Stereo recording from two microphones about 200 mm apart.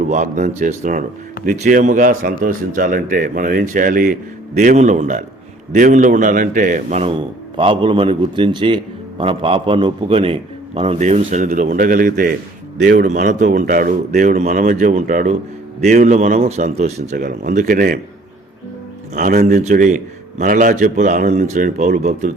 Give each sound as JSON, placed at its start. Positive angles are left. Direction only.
{"t": 0.1, "sound": "speech", "side_deg": -40}
{"t": 7.5, "sound": "a man's voice", "side_deg": -25}
{"t": 19.1, "sound": "speech", "side_deg": -40}